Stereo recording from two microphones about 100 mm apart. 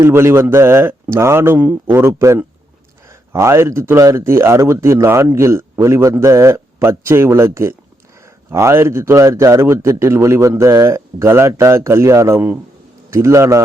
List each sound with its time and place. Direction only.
0.0 s speech: 25° right (ahead or behind)